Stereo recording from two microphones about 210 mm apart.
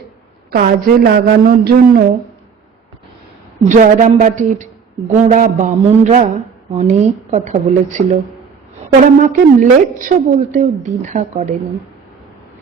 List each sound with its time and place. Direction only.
0.5 s a woman's voice: 45° right (ahead or behind)
3.7 s a woman's voice: 35° right (ahead or behind)
9.2 s a woman's voice: 40° right (ahead or behind)